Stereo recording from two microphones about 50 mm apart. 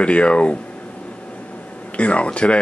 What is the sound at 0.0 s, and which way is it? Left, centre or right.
Speech, left.